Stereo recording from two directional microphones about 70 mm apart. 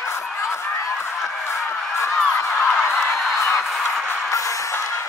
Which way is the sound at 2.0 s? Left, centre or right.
Left.